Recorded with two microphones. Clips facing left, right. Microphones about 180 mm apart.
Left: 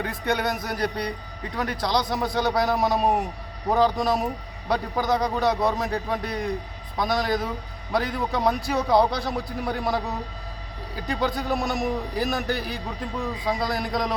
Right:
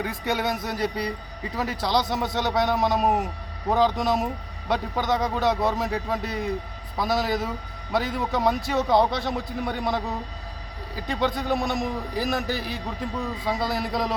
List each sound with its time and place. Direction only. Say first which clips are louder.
0.0 s a man's voice: left 1 dB; 5° right (ahead or behind)
0.5 s speech: even; 25° right (ahead or behind)
0.8 s a man's voice: even; 5° right (ahead or behind)